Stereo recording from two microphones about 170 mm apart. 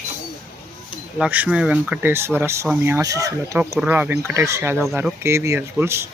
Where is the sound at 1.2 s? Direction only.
10° right (ahead or behind).